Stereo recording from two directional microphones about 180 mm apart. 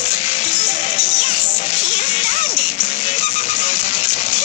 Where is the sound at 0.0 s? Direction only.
40° left (ahead or behind).